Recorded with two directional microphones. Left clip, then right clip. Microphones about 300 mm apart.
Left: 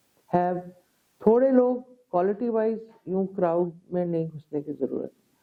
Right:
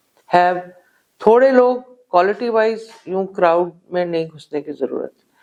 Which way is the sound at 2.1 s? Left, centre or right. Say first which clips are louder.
Right 10 dB; centre.